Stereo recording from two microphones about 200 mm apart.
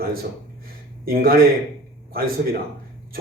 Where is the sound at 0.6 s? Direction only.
45° right (ahead or behind).